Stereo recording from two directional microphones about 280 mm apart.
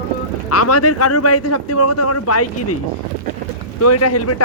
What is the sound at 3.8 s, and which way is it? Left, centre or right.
Speech, left.